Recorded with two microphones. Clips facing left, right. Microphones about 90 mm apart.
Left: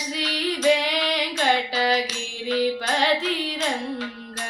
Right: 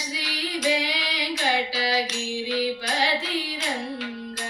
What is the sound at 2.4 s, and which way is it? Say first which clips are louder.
Music: left 5 dB; 45° left (ahead or behind).